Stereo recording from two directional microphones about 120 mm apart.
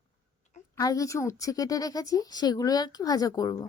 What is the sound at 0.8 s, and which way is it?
Speech, 30° left (ahead or behind).